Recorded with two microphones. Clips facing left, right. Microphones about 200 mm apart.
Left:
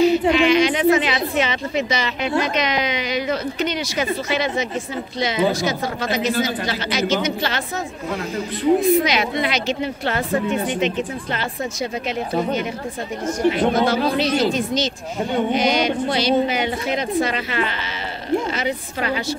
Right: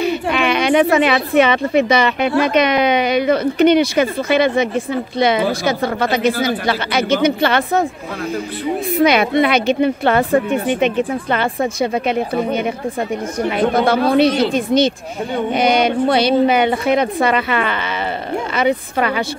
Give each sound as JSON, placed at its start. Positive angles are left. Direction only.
{"t": 0.0, "sound": "a woman's voice", "side_deg": -60}
{"t": 9.0, "sound": "a woman's voice", "side_deg": -60}
{"t": 13.5, "sound": "a woman's voice", "side_deg": -60}